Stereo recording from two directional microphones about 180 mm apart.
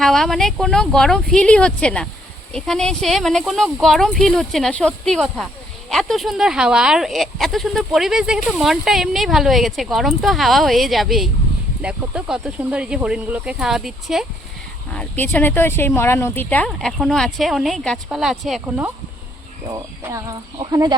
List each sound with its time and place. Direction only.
0.0 s speech: centre (ahead or behind)
14.9 s speech: 10° left (ahead or behind)
19.7 s speech: 20° right (ahead or behind)